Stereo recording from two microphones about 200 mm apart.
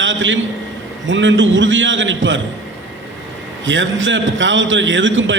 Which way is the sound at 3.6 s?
70° right (ahead or behind).